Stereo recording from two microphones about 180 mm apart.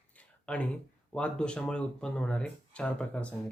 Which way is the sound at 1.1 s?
5° left (ahead or behind).